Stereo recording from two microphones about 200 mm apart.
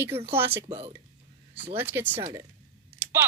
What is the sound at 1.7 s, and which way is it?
Speech, 10° right (ahead or behind).